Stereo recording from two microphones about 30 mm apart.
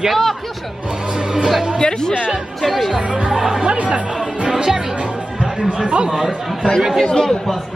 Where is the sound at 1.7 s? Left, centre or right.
Left.